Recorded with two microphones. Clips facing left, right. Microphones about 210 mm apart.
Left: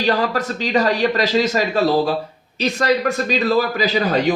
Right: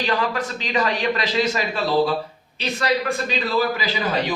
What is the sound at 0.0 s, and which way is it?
A man's voice, 40° left (ahead or behind).